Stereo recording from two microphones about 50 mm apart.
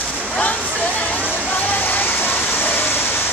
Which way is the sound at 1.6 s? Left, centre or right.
Left.